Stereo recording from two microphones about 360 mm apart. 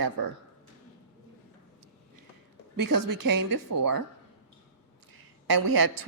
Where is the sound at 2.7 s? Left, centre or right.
Right.